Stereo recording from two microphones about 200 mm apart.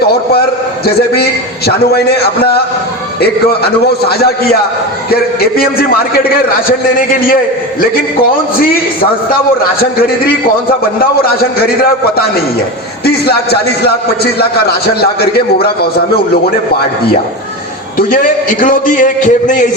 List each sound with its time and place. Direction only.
0.9 s a man's voice: 50° left (ahead or behind)
10.2 s a man's voice: 50° left (ahead or behind)
13.1 s a man's voice: 55° left (ahead or behind)
17.9 s a man's voice: 45° left (ahead or behind)